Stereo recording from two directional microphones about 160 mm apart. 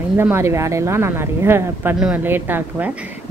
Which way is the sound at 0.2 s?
15° right (ahead or behind).